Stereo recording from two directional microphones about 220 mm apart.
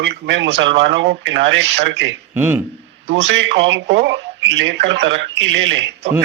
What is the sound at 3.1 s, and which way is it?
Speech, 55° right (ahead or behind).